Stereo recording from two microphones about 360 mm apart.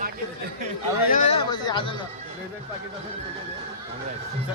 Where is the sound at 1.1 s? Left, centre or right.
Centre.